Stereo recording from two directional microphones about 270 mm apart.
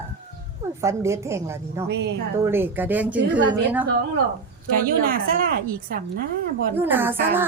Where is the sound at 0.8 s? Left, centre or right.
Centre.